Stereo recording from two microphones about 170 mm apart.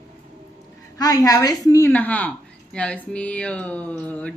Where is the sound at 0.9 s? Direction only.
20° left (ahead or behind).